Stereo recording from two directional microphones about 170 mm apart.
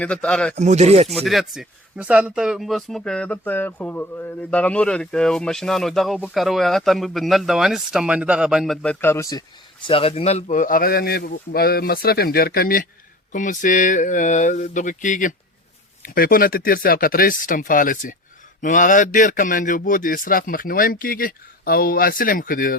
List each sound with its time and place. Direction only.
0.0 s speech: 5° left (ahead or behind)
0.5 s speech: 40° right (ahead or behind)
1.0 s speech: centre (ahead or behind); by 9.4 s 15° left (ahead or behind)
9.8 s a man's voice: 35° left (ahead or behind); by 22.8 s 55° left (ahead or behind)